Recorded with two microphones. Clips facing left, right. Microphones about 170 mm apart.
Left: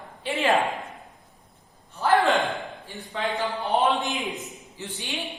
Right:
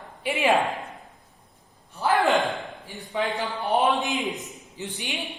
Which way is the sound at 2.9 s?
15° right (ahead or behind).